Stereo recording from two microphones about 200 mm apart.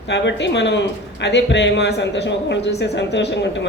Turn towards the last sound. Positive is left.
turn(degrees=60)  # may be behind; listen again after turning